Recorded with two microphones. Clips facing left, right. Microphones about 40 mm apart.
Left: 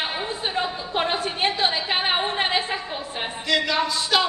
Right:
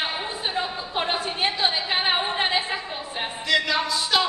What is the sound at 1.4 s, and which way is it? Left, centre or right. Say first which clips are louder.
Speech: left 2 dB; left.